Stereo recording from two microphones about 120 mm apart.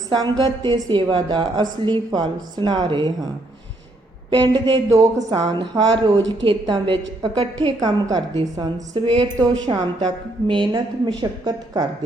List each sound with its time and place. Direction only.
0.1 s a woman's voice: 35° right (ahead or behind)
4.3 s a woman's voice: 45° right (ahead or behind)
4.9 s speech: 30° right (ahead or behind)
5.4 s a woman's voice: 40° right (ahead or behind)
7.8 s a woman's voice: 30° right (ahead or behind)
8.9 s a woman's voice: 45° right (ahead or behind)